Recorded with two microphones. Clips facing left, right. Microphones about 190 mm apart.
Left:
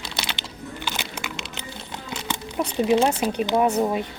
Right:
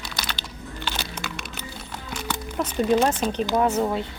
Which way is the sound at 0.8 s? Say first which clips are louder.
Right 1 dB; 10° left (ahead or behind).